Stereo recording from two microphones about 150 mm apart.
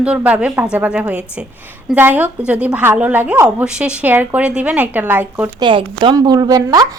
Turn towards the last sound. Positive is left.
turn(degrees=-25)  # may be behind; listen again after turning